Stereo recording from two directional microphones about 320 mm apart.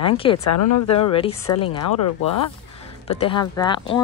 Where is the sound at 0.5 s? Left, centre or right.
Left.